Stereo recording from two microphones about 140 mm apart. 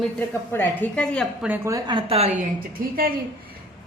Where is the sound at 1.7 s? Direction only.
35° right (ahead or behind).